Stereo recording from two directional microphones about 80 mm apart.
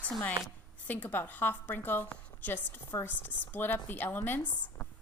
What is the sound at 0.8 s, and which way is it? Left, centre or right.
A woman's voice, left.